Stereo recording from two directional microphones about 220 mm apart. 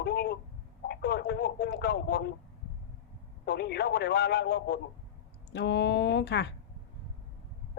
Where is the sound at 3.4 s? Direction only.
45° left (ahead or behind).